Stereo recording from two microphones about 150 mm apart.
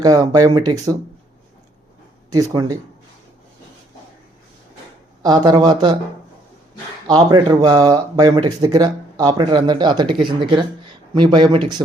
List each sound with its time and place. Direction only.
0.0 s speech: 25° right (ahead or behind)
2.3 s speech: 25° right (ahead or behind)
5.2 s speech: 30° right (ahead or behind)
7.1 s speech: 30° right (ahead or behind)